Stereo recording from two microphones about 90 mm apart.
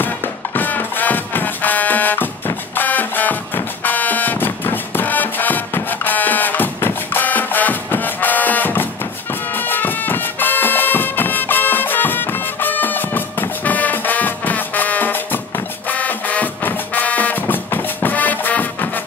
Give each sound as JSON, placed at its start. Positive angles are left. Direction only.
{"t": 0.6, "sound": "music", "side_deg": 20}